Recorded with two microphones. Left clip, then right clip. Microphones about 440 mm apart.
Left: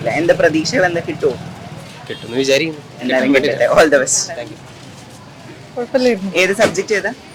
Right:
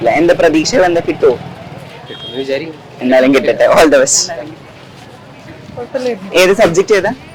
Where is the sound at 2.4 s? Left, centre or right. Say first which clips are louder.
Left 4 dB; left.